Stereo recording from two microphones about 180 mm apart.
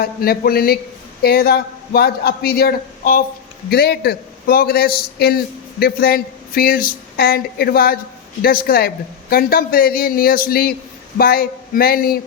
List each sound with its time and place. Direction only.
0.0 s speech: 55° left (ahead or behind)